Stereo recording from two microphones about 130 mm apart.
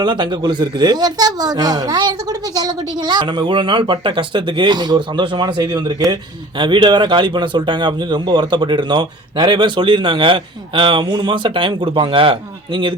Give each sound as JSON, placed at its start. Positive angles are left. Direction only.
{"t": 0.0, "sound": "speech", "side_deg": -35}